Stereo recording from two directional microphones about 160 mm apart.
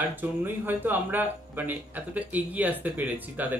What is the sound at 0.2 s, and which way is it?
Speech, 10° right (ahead or behind).